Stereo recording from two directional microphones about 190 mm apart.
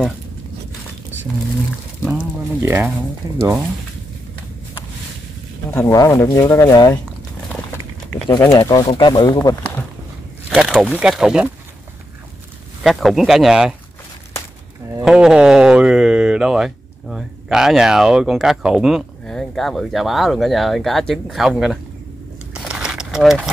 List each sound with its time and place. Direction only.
2.0 s speech: 10° right (ahead or behind)
5.7 s speech: 15° left (ahead or behind)
8.3 s speech: 20° left (ahead or behind)
10.5 s speech: 5° right (ahead or behind)
12.8 s speech: centre (ahead or behind)
15.0 s speech: 5° right (ahead or behind)
22.5 s a sound: 5° right (ahead or behind)